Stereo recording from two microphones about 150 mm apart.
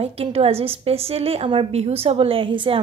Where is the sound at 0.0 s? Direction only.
40° right (ahead or behind).